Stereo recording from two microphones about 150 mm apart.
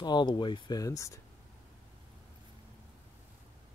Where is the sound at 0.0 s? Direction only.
30° left (ahead or behind).